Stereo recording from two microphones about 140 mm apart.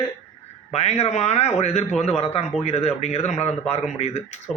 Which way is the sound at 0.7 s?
50° left (ahead or behind).